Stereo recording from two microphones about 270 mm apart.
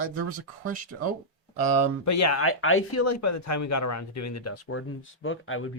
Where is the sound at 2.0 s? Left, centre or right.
Left.